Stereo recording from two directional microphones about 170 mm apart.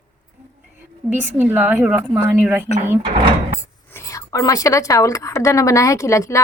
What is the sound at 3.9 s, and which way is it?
A woman's voice, 20° left (ahead or behind).